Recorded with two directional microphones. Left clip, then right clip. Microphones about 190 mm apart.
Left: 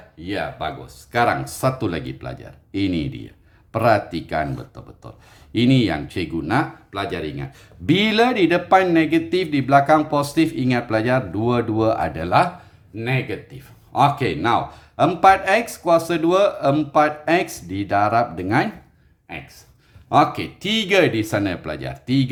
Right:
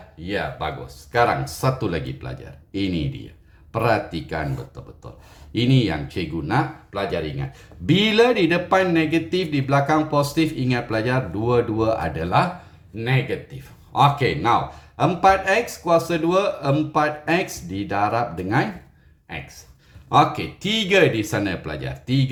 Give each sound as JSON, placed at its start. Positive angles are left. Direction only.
{"t": 0.2, "sound": "speech", "side_deg": 20}
{"t": 1.1, "sound": "speech", "side_deg": 35}
{"t": 13.0, "sound": "speech", "side_deg": 20}
{"t": 19.3, "sound": "speech", "side_deg": 25}